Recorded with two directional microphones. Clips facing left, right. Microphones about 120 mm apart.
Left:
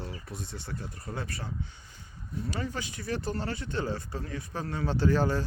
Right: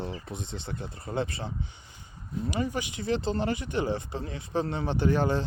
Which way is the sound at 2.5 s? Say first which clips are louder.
Right 5 dB; 15° right (ahead or behind).